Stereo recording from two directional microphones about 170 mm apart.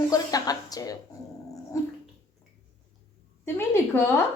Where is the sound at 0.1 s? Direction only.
20° left (ahead or behind).